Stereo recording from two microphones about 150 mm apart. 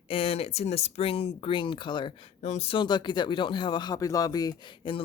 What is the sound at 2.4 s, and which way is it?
Speech, 45° left (ahead or behind).